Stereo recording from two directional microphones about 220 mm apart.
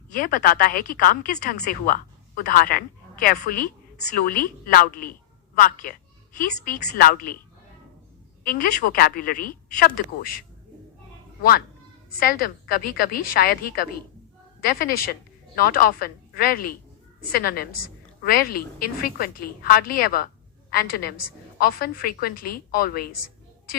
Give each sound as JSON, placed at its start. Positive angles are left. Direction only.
{"t": 0.1, "sound": "speech", "side_deg": 40}
{"t": 8.4, "sound": "speech", "side_deg": 40}
{"t": 12.2, "sound": "a woman's voice", "side_deg": 40}